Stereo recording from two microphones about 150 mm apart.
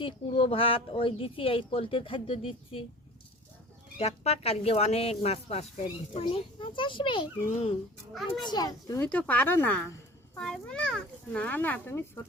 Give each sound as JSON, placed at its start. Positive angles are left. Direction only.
{"t": 0.0, "sound": "speech", "side_deg": 35}
{"t": 3.9, "sound": "a child's voice", "side_deg": 45}
{"t": 9.0, "sound": "a child's voice", "side_deg": 10}